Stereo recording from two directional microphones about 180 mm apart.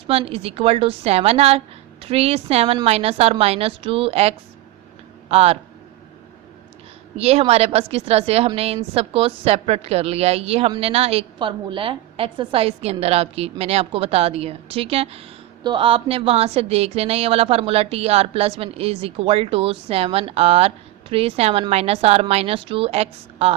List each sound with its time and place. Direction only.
0.1 s a woman's voice: 35° right (ahead or behind)
7.2 s a woman's voice: 35° right (ahead or behind)